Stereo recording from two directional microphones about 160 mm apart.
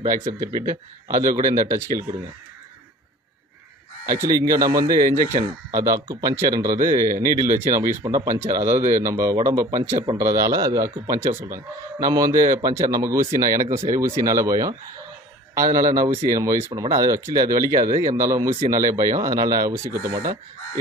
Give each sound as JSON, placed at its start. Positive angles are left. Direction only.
{"t": 0.3, "sound": "speech", "side_deg": -25}
{"t": 4.0, "sound": "speech", "side_deg": -20}
{"t": 8.7, "sound": "speech", "side_deg": -50}
{"t": 9.0, "sound": "speech", "side_deg": -20}
{"t": 13.6, "sound": "speech", "side_deg": -55}
{"t": 13.8, "sound": "speech", "side_deg": -20}
{"t": 17.7, "sound": "speech", "side_deg": -60}
{"t": 18.0, "sound": "speech", "side_deg": -20}